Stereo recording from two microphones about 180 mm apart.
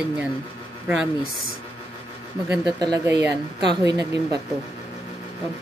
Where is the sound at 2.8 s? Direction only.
20° right (ahead or behind).